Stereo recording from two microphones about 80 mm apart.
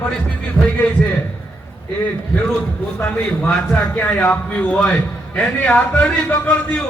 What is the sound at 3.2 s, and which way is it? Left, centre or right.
Speech, centre.